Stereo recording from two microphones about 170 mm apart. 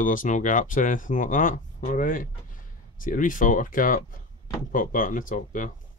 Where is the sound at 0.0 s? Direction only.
50° left (ahead or behind).